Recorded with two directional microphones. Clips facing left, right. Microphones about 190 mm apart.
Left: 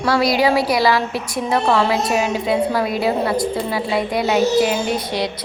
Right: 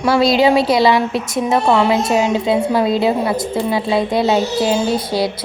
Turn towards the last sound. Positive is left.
turn(degrees=-30)  # may be behind; listen again after turning